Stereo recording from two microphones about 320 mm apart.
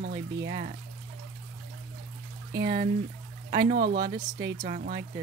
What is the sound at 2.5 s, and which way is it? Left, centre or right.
Speech, right.